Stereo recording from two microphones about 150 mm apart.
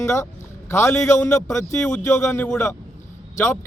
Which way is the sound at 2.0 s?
15° left (ahead or behind).